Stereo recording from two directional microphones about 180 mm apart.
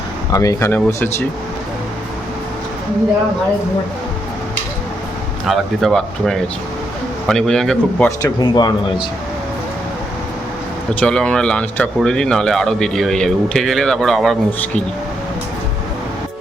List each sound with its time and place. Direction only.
0.3 s speech: 20° left (ahead or behind)
5.5 s speech: centre (ahead or behind)
8.2 s speech: 20° left (ahead or behind)
11.0 s speech: 5° left (ahead or behind)